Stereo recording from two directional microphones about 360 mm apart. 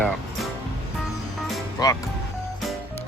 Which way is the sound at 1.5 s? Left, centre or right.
Centre.